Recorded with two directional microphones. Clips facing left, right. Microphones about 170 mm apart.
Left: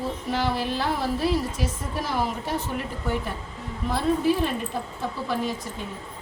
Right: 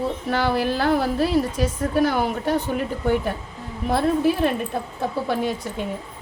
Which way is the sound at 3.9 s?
65° right (ahead or behind).